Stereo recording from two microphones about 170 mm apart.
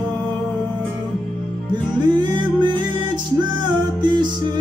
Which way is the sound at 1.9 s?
25° right (ahead or behind).